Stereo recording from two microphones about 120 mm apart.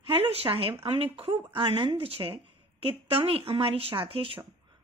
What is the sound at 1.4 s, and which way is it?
A woman's voice, 40° right (ahead or behind).